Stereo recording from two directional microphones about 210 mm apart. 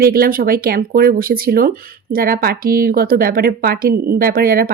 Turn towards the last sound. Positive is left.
turn(degrees=-45)  # may be behind; listen again after turning